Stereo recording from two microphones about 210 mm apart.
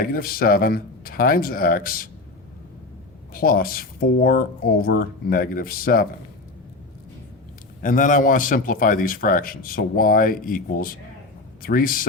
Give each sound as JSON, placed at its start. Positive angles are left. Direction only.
{"t": 0.0, "sound": "speech", "side_deg": 45}
{"t": 3.3, "sound": "speech", "side_deg": 45}
{"t": 7.8, "sound": "a man's voice", "side_deg": 40}